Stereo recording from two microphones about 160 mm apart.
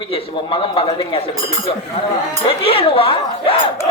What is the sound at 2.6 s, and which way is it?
Speech, 35° left (ahead or behind).